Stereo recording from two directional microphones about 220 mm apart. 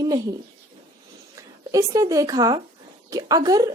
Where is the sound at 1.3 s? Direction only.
15° right (ahead or behind).